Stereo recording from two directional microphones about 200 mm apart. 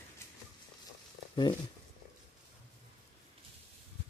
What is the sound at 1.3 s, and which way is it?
Speech, 20° left (ahead or behind).